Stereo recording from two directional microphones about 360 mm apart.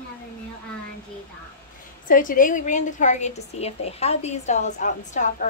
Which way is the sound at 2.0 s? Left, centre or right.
Left.